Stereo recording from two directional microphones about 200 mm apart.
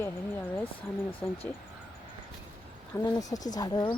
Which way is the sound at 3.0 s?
20° left (ahead or behind).